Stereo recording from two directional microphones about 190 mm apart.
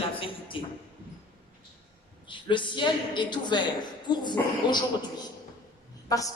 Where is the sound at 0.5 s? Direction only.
25° left (ahead or behind).